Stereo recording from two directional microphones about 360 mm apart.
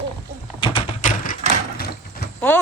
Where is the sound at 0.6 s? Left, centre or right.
Centre.